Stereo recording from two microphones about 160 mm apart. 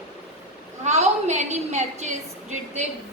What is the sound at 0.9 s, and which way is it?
A woman's voice, 45° right (ahead or behind).